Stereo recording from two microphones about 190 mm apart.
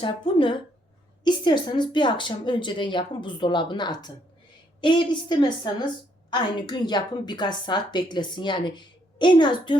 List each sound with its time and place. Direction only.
0.0 s a woman's voice: 25° left (ahead or behind)